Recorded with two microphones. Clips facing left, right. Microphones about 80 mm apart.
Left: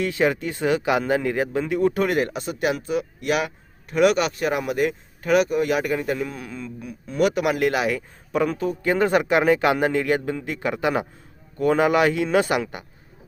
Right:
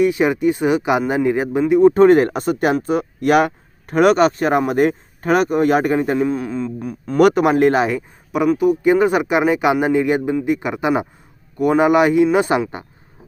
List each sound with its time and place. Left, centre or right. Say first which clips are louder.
0.0 s speech: right 7 dB; centre; by 7.4 s right
7.4 s speech: right 7 dB; right
8.3 s a man's voice: right 7 dB; centre